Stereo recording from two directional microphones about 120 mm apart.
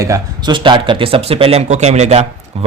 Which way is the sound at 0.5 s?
45° right (ahead or behind).